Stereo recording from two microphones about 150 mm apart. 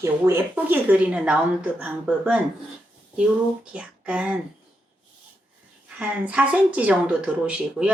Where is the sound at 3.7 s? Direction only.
10° right (ahead or behind).